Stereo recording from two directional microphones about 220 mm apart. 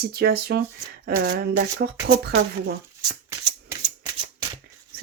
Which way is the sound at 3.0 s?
20° right (ahead or behind).